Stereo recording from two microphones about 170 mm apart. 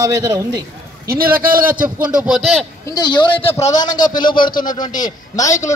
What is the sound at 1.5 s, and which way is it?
Speech, 55° right (ahead or behind).